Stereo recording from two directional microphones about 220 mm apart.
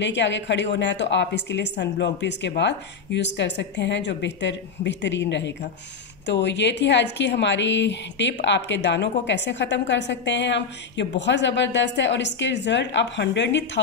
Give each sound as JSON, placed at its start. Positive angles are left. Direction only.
{"t": 0.0, "sound": "a woman's voice", "side_deg": 55}